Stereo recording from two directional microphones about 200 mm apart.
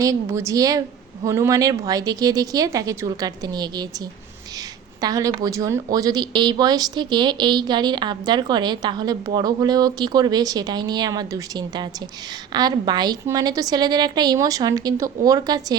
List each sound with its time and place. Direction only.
0.0 s a woman's voice: 15° right (ahead or behind)
4.9 s speech: 20° right (ahead or behind)